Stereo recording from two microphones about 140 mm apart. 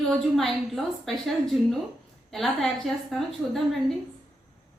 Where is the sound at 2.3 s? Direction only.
Centre (ahead or behind).